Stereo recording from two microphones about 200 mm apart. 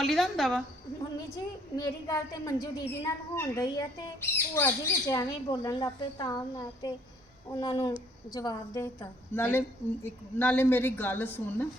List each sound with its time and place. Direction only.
0.0 s a woman's voice: centre (ahead or behind)
1.7 s a woman's voice: 20° left (ahead or behind)